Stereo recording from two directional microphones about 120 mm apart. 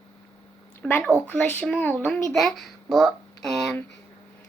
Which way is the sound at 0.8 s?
15° left (ahead or behind).